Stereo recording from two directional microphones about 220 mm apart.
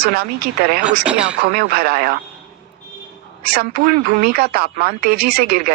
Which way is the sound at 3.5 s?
45° right (ahead or behind).